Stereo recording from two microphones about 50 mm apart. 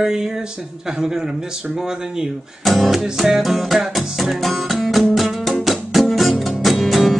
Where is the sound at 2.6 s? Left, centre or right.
Centre.